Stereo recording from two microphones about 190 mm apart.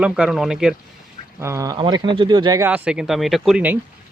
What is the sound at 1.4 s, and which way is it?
Speech, 15° right (ahead or behind).